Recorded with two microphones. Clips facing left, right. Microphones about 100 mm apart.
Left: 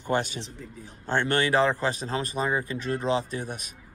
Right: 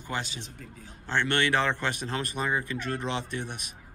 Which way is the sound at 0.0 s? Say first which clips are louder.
Left 7 dB; 50° left (ahead or behind).